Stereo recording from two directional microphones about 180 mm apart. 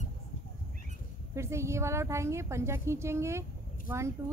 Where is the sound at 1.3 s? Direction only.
15° right (ahead or behind).